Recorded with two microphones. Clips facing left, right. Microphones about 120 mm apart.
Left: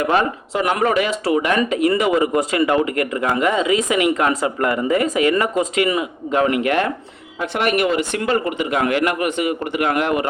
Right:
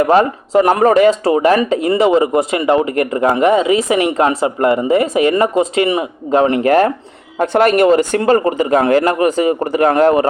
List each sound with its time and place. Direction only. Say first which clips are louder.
0.0 s speech: right 6 dB; 35° right (ahead or behind)